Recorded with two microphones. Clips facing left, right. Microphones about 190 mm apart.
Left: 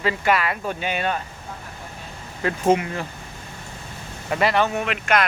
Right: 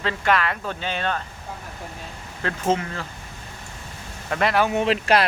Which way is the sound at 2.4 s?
15° left (ahead or behind).